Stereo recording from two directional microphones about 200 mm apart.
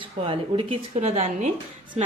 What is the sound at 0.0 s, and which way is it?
A woman's voice, 25° right (ahead or behind).